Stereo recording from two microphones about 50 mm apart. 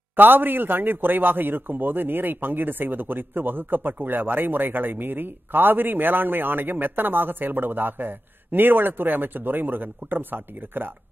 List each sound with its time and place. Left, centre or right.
0.1 s a man's voice: right